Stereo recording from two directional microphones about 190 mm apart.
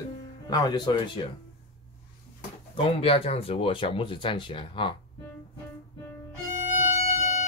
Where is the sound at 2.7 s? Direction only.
30° left (ahead or behind).